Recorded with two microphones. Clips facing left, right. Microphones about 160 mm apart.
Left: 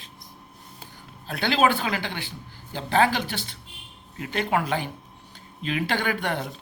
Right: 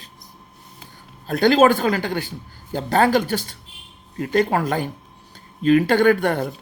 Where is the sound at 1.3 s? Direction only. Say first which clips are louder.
Right 8 dB; 40° right (ahead or behind).